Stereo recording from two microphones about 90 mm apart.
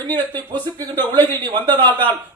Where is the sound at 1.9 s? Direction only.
20° left (ahead or behind).